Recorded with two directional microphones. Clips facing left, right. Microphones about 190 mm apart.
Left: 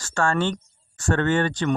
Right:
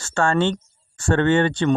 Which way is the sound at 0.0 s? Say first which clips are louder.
Right 3 dB; 25° right (ahead or behind).